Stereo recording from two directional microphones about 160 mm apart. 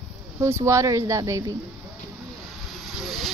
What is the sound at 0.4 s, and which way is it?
Speech, 15° right (ahead or behind).